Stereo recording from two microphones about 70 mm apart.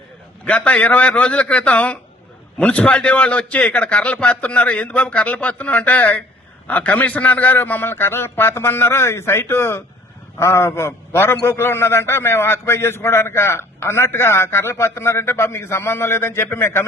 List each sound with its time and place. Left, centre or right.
0.4 s a man's voice: centre; by 16.8 s left